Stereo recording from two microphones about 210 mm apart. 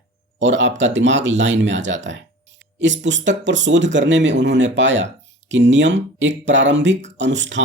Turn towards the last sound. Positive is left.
turn(degrees=-60)  # may be behind; listen again after turning